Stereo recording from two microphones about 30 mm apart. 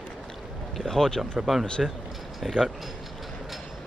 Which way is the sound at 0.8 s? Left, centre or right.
Centre.